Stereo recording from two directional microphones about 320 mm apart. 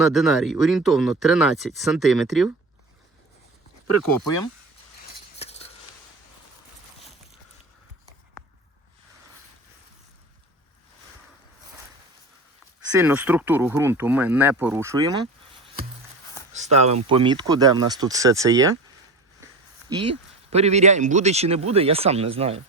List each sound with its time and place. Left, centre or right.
0.1 s speech: centre
4.0 s speech: left
5.4 s scissors: centre
13.0 s speech: centre
16.6 s speech: right
19.9 s speech: centre